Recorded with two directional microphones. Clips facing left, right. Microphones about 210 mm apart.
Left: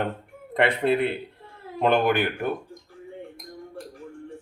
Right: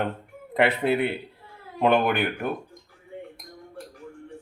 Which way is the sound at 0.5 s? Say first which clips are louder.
Even; 5° right (ahead or behind).